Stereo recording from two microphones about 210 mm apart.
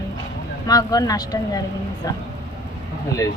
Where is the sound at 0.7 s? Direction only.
15° left (ahead or behind).